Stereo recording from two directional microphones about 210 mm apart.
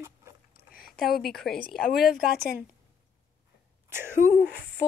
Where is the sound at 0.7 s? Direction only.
45° left (ahead or behind).